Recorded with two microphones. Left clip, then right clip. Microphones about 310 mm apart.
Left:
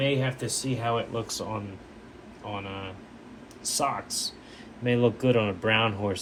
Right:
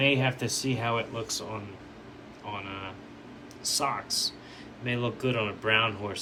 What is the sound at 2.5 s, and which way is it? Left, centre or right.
Speech, centre.